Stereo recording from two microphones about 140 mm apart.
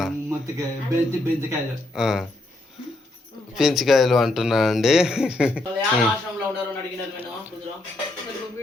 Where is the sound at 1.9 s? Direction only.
5° right (ahead or behind).